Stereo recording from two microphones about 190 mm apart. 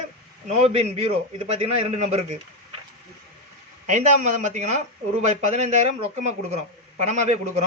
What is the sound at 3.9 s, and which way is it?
A man's voice, 40° right (ahead or behind).